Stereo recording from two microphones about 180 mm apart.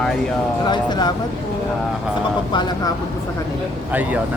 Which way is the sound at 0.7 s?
25° left (ahead or behind).